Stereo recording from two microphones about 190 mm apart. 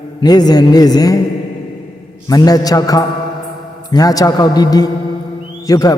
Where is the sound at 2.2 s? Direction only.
20° left (ahead or behind).